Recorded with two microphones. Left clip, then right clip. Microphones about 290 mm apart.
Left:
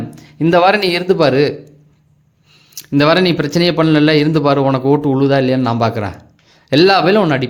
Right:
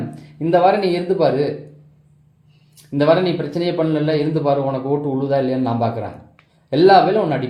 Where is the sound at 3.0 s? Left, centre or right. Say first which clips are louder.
Left 4 dB; left.